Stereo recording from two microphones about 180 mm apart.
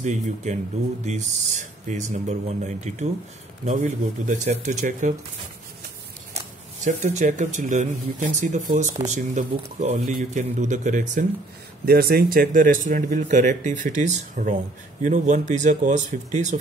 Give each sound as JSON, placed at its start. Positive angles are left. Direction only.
{"t": 0.0, "sound": "speech", "side_deg": -40}
{"t": 6.8, "sound": "speech", "side_deg": -40}
{"t": 11.8, "sound": "speech", "side_deg": -60}